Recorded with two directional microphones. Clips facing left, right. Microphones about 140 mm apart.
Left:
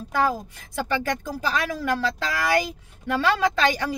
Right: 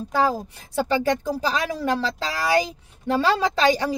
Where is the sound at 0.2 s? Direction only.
25° right (ahead or behind).